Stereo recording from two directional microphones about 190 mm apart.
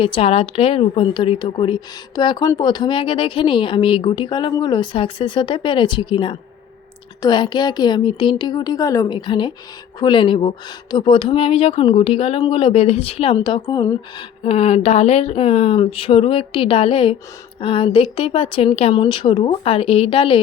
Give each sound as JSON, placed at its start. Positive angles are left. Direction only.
{"t": 0.0, "sound": "a woman's voice", "side_deg": 30}
{"t": 14.4, "sound": "a woman's voice", "side_deg": 30}